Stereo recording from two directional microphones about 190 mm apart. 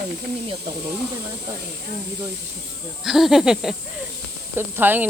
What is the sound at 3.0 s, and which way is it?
Speech, centre (ahead or behind).